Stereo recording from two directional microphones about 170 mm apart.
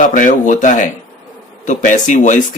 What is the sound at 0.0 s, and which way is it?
A man's voice, 50° left (ahead or behind).